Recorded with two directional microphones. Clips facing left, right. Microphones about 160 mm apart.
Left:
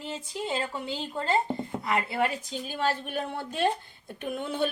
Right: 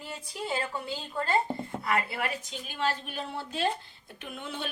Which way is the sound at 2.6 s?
45° left (ahead or behind).